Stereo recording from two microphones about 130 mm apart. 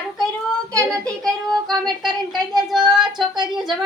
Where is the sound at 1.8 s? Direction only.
Centre (ahead or behind).